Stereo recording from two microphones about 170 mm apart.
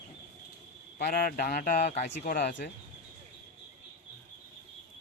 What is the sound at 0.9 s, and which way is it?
Speech, 60° left (ahead or behind).